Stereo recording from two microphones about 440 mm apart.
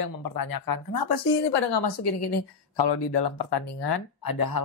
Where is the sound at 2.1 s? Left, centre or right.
Left.